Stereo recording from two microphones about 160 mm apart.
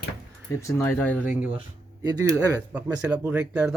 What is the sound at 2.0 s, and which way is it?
Speech, 20° right (ahead or behind).